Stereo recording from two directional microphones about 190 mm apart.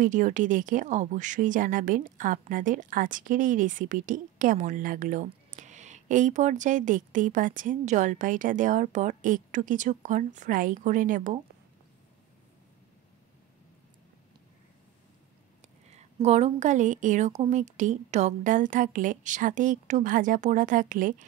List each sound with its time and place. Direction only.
0.0 s speech: 40° right (ahead or behind)
15.9 s a woman's voice: 35° right (ahead or behind)